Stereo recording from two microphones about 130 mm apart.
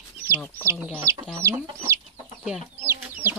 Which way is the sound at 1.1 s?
25° right (ahead or behind).